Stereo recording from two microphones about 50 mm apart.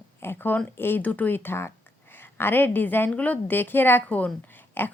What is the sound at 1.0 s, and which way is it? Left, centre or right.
Speech, left.